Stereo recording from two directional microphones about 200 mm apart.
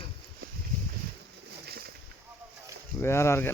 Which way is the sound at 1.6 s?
50° right (ahead or behind).